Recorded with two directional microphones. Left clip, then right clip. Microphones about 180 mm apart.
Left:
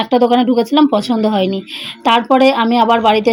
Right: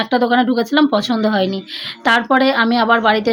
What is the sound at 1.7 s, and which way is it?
Speech, 35° right (ahead or behind).